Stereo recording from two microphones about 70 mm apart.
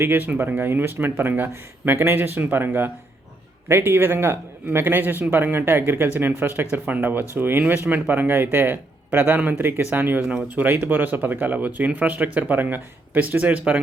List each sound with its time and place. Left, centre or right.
0.0 s speech: right